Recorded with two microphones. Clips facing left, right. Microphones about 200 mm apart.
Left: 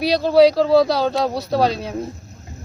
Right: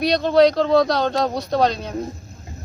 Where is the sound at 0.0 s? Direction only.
5° left (ahead or behind).